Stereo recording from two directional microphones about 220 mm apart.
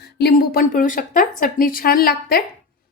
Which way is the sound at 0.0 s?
45° left (ahead or behind).